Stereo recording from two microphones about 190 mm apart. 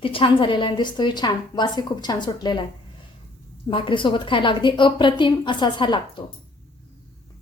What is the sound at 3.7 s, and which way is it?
A woman's voice, 25° left (ahead or behind).